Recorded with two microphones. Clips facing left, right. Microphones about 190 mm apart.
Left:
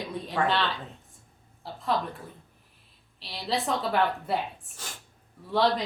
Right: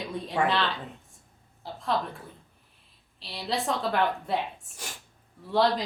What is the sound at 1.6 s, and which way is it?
Speech, centre (ahead or behind).